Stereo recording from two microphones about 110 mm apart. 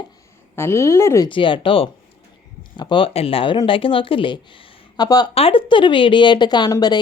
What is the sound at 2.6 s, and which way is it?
Speech, 45° left (ahead or behind).